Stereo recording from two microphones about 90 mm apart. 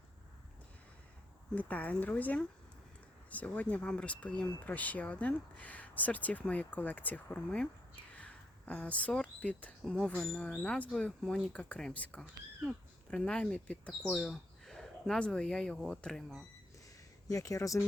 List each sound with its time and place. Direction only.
1.5 s speech: 15° left (ahead or behind)
14.1 s speech: centre (ahead or behind)
17.2 s speech: 40° left (ahead or behind)